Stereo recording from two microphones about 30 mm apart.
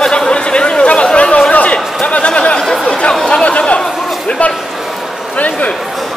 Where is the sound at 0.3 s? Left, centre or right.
Left.